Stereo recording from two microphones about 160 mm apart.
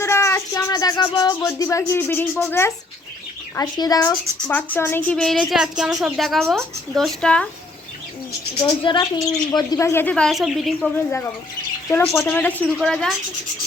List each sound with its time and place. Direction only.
0.0 s a woman's voice: 15° left (ahead or behind)
8.8 s speech: 30° left (ahead or behind); by 10.9 s centre (ahead or behind)
10.9 s a woman's voice: 15° left (ahead or behind)